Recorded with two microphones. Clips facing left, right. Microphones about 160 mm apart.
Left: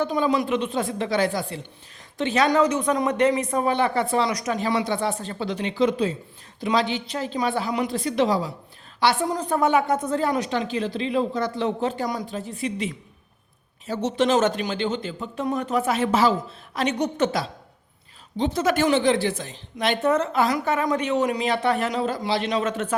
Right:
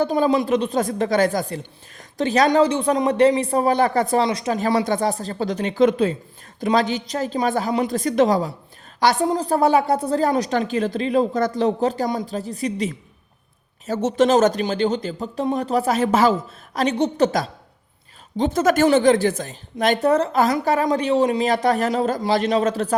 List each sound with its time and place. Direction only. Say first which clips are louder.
0.0 s a woman's voice: right 4 dB; 35° right (ahead or behind)
4.3 s speech: right 3 dB; 25° right (ahead or behind)
4.5 s a woman's voice: right 5 dB; 45° right (ahead or behind)
16.7 s a woman's voice: right 4 dB; 35° right (ahead or behind)